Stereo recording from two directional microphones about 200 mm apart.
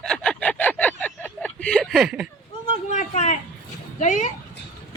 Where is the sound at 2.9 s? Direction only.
35° left (ahead or behind).